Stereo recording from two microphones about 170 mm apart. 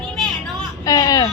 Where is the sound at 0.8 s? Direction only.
20° left (ahead or behind).